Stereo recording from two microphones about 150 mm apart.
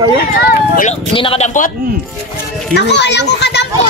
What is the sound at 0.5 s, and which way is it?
Speech, 65° left (ahead or behind).